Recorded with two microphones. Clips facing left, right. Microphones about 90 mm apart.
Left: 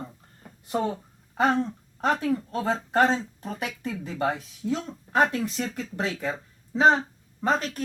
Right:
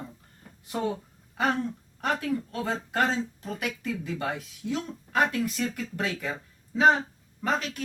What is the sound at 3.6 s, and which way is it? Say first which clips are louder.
Speech: right 1 dB; 35° left (ahead or behind).